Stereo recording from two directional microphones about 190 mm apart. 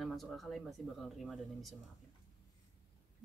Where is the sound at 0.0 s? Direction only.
Centre (ahead or behind).